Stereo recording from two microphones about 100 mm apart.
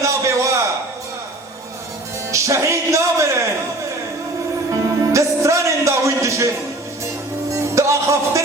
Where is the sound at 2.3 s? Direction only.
30° right (ahead or behind).